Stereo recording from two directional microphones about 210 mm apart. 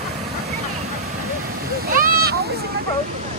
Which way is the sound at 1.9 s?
45° right (ahead or behind).